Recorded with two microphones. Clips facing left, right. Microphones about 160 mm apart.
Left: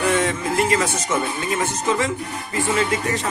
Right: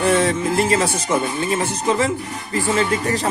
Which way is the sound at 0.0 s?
30° right (ahead or behind).